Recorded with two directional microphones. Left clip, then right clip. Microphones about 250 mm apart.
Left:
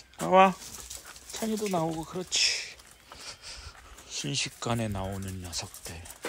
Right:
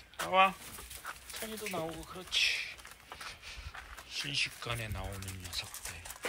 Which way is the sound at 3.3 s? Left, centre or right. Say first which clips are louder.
Left 3 dB; centre.